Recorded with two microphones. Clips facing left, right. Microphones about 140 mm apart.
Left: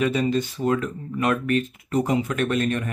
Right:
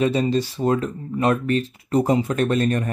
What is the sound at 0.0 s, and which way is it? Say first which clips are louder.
Speech: right 2 dB; 30° right (ahead or behind).